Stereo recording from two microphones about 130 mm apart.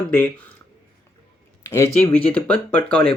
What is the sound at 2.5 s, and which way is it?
Speech, 10° left (ahead or behind).